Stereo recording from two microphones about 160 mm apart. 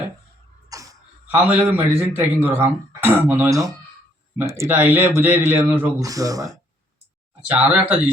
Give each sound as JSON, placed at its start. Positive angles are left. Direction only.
{"t": 0.7, "sound": "a sound", "side_deg": -20}
{"t": 1.3, "sound": "speech", "side_deg": -10}
{"t": 7.5, "sound": "speech", "side_deg": -5}